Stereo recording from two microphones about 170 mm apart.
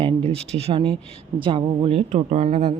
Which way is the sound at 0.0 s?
35° right (ahead or behind).